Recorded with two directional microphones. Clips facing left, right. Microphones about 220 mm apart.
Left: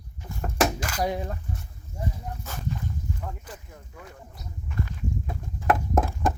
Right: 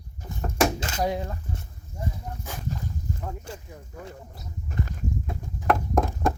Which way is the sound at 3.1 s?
40° right (ahead or behind).